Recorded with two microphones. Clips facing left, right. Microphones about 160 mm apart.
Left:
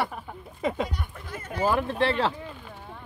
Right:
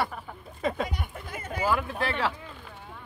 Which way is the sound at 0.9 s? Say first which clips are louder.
Even; 10° right (ahead or behind).